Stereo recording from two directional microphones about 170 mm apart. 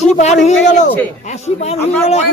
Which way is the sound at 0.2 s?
40° left (ahead or behind).